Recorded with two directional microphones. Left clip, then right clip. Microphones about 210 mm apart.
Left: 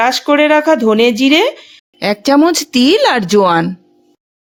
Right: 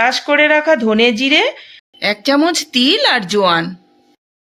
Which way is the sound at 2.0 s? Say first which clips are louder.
Left 3 dB; 50° left (ahead or behind).